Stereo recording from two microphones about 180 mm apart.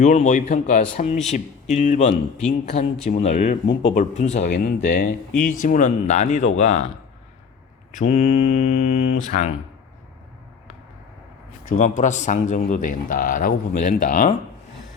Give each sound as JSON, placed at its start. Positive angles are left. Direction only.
{"t": 0.0, "sound": "a man's voice", "side_deg": 40}
{"t": 4.4, "sound": "speech", "side_deg": 60}
{"t": 4.8, "sound": "a man's voice", "side_deg": 50}
{"t": 7.9, "sound": "speech", "side_deg": 40}
{"t": 11.8, "sound": "a man's voice", "side_deg": 45}